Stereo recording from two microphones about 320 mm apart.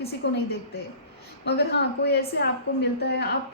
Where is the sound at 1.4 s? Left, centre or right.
Left.